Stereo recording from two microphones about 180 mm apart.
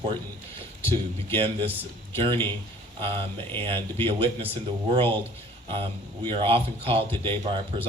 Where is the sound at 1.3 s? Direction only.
30° right (ahead or behind).